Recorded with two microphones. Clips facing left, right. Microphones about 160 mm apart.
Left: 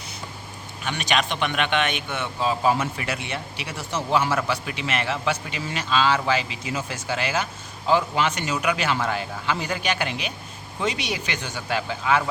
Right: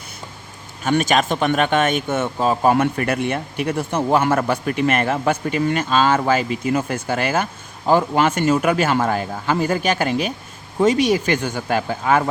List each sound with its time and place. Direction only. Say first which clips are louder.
0.8 s speech: right 8 dB; 45° right (ahead or behind)